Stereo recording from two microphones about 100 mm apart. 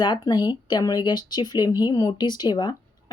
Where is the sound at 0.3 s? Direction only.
45° left (ahead or behind).